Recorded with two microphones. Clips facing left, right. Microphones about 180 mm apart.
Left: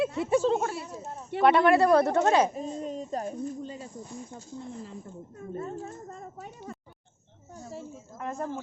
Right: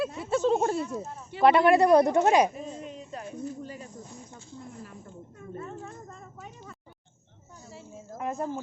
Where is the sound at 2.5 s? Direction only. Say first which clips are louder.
Left 5 dB; 35° left (ahead or behind).